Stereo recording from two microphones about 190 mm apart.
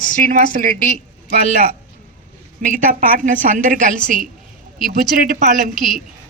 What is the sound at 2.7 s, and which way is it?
A woman's voice, 45° right (ahead or behind).